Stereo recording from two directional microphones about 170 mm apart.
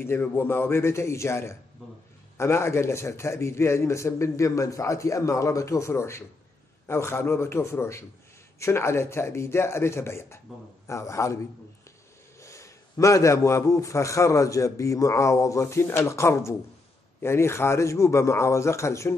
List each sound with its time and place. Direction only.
0.0 s a man's voice: 15° left (ahead or behind)
12.4 s a man's voice: 15° left (ahead or behind)